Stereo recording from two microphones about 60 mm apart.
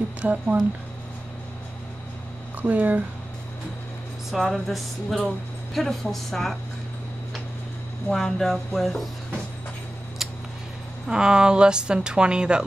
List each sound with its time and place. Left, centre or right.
0.2 s speech: right
2.6 s speech: right
4.3 s music: centre
8.1 s music: centre
11.1 s a woman's voice: centre